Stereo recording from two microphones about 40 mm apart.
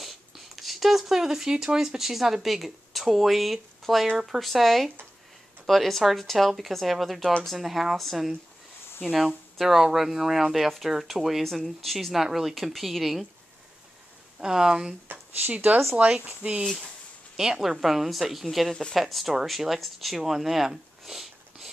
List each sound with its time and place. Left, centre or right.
0.0 s a woman's voice: centre
9.6 s a woman's voice: centre
14.4 s speech: centre
15.5 s speech: right
17.4 s a woman's voice: centre
18.7 s speech: centre
18.9 s a woman's voice: centre